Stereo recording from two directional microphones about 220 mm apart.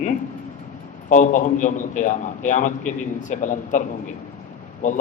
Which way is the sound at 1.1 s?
35° left (ahead or behind).